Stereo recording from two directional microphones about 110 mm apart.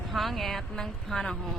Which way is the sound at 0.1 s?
Centre (ahead or behind).